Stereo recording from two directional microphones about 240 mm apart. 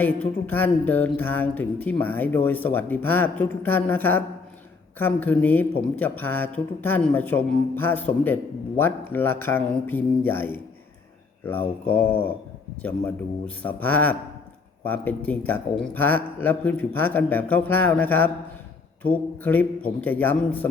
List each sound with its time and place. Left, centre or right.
0.0 s speech: centre
11.9 s speech: centre
13.6 s speech: centre